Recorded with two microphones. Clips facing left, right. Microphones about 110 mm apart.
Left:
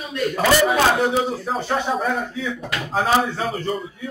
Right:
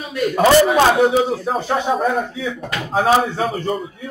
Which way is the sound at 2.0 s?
Centre (ahead or behind).